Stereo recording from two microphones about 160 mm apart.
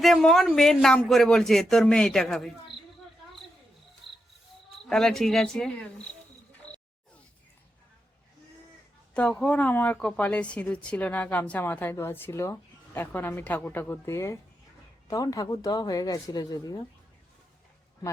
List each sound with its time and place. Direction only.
0.0 s speech: 5° left (ahead or behind)
4.0 s cricket: centre (ahead or behind)
4.9 s speech: 5° left (ahead or behind)
9.1 s a woman's voice: 5° left (ahead or behind); by 16.8 s 25° left (ahead or behind)